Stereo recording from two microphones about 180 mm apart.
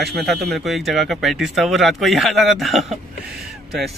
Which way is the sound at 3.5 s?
Centre (ahead or behind).